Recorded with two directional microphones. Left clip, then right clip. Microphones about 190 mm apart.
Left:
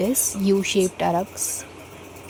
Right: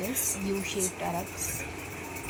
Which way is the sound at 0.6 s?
45° left (ahead or behind).